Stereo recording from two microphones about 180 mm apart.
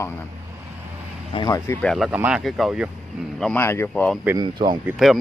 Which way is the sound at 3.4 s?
10° left (ahead or behind).